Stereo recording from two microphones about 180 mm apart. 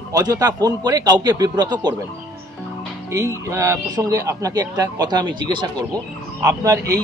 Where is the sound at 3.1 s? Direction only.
20° right (ahead or behind).